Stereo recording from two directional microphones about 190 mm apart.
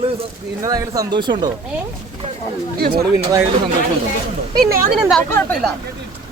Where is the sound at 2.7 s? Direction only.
55° right (ahead or behind).